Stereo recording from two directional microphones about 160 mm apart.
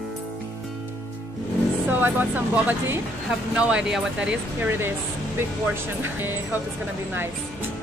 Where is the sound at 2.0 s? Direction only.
10° right (ahead or behind).